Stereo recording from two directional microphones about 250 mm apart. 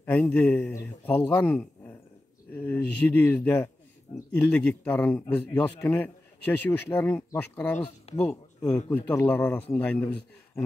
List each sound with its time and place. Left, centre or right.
0.0 s a man's voice: centre